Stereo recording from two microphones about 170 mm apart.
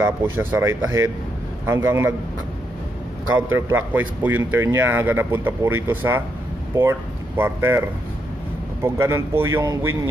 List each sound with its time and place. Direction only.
0.2 s a man's voice: 15° right (ahead or behind)
3.3 s a man's voice: 10° right (ahead or behind)
8.8 s a man's voice: 15° right (ahead or behind)